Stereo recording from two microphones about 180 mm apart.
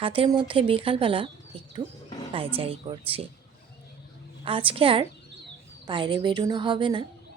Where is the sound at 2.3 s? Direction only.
30° right (ahead or behind).